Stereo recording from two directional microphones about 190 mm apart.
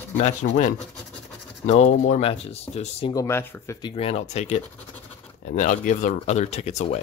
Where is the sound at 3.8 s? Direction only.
30° left (ahead or behind).